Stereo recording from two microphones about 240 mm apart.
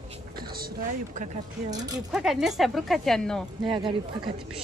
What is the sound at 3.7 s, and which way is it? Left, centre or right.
Speech, centre.